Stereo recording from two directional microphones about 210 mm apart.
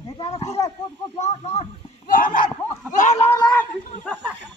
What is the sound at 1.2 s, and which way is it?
Speech, 30° left (ahead or behind).